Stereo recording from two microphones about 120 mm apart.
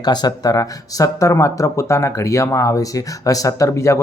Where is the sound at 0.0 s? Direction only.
35° left (ahead or behind).